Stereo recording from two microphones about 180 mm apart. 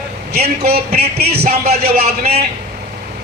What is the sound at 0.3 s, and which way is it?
Speech, 60° right (ahead or behind).